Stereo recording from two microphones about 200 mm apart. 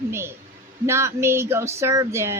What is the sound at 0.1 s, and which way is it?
A woman's voice, 10° right (ahead or behind).